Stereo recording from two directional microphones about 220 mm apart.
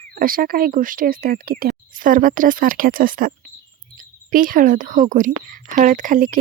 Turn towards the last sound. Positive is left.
turn(degrees=-40)  # may be behind; listen again after turning